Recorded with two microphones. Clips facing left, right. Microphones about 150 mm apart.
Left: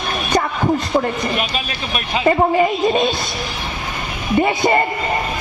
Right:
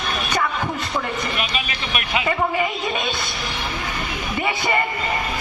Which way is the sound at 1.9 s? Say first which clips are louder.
Left 7 dB; 40° left (ahead or behind).